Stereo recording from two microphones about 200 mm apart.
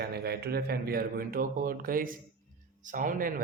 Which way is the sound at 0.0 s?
50° right (ahead or behind).